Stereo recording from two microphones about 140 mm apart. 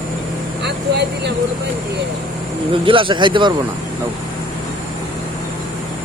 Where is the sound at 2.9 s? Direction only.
35° right (ahead or behind).